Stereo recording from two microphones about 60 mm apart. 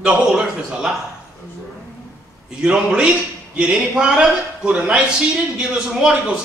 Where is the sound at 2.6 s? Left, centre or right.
Centre.